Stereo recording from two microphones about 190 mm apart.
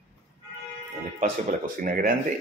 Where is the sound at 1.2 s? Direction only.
45° right (ahead or behind).